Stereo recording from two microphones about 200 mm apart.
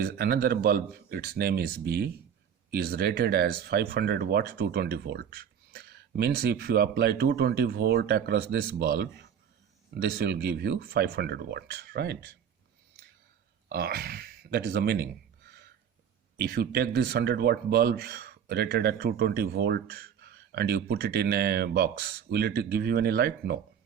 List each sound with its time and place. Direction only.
0.0 s speech: 50° right (ahead or behind)
13.7 s speech: 50° right (ahead or behind)
15.4 s a sound: 55° right (ahead or behind)
16.4 s speech: 55° right (ahead or behind)